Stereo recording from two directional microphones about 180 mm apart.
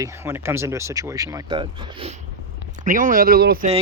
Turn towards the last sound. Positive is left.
turn(degrees=-60)  # may be behind; listen again after turning